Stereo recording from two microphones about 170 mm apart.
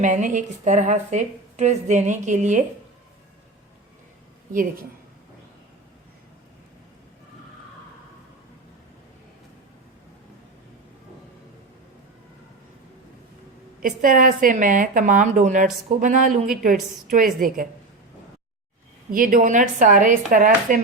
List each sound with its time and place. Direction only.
0.0 s a woman's voice: 45° right (ahead or behind)
4.5 s a woman's voice: 60° right (ahead or behind)
13.8 s a woman's voice: 50° right (ahead or behind)
19.1 s a woman's voice: 55° right (ahead or behind)